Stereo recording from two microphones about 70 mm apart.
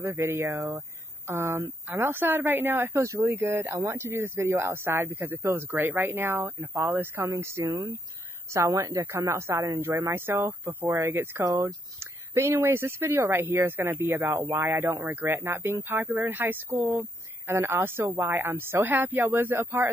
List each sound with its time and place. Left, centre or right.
0.0 s speech: right
1.9 s speech: right